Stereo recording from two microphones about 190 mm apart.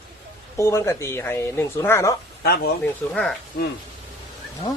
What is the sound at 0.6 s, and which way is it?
A woman's voice, 15° left (ahead or behind).